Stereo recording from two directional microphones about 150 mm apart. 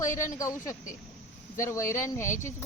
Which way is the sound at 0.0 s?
60° left (ahead or behind).